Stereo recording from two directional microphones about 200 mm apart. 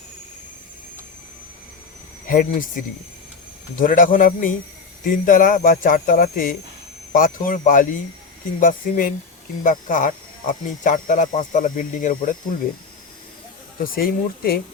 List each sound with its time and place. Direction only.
2.2 s speech: 45° left (ahead or behind)
13.7 s speech: 45° left (ahead or behind)